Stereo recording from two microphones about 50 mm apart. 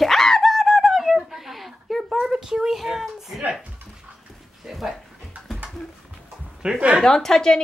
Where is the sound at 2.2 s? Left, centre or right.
Centre.